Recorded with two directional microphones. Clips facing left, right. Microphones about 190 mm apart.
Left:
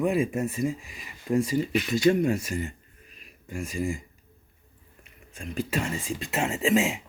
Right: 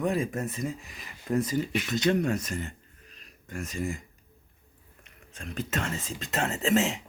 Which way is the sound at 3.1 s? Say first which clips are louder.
Left 3 dB; 5° left (ahead or behind).